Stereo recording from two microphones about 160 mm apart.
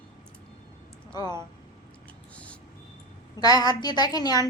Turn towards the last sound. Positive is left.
turn(degrees=25)  # may be behind; listen again after turning